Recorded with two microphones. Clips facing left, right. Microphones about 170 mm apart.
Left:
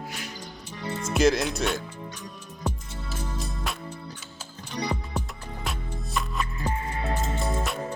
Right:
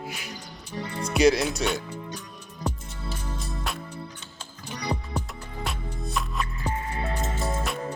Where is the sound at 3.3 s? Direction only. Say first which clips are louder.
Even; centre (ahead or behind).